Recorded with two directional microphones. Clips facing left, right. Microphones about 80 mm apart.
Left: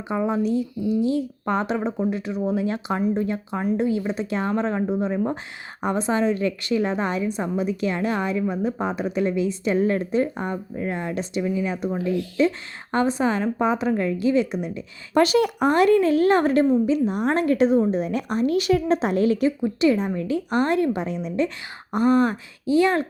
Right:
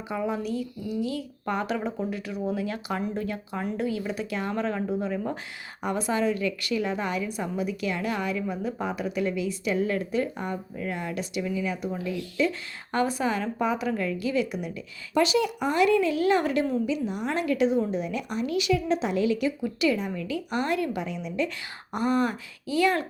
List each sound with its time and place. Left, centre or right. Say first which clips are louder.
0.1 s a woman's voice: left 6 dB; left
11.9 s speech: left 7 dB; left
12.4 s speech: left 3 dB; left
15.1 s a woman's voice: left 5 dB; left